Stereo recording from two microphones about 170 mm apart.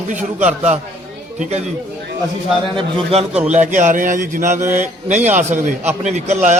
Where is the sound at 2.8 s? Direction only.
30° right (ahead or behind).